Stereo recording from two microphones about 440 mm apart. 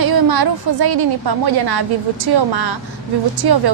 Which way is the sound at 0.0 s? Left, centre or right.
Right.